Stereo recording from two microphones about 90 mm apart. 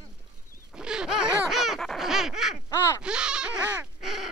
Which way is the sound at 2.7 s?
30° left (ahead or behind).